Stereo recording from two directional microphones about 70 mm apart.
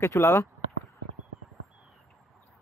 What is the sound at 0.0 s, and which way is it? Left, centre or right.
Speech, left.